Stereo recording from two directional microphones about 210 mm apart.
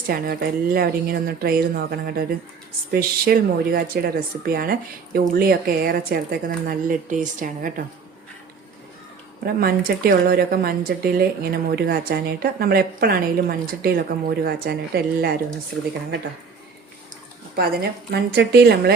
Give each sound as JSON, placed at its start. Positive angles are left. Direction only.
{"t": 0.1, "sound": "a woman's voice", "side_deg": -45}
{"t": 9.4, "sound": "a woman's voice", "side_deg": -45}
{"t": 17.5, "sound": "a woman's voice", "side_deg": -45}